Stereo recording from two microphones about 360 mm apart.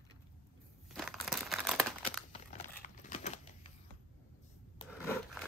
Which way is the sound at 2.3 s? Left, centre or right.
Centre.